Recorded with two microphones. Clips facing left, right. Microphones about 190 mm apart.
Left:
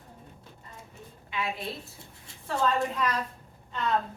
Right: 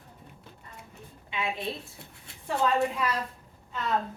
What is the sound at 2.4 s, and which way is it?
Speech, 10° right (ahead or behind).